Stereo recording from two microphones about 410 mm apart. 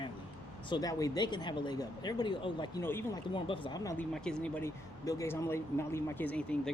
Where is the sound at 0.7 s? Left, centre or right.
Centre.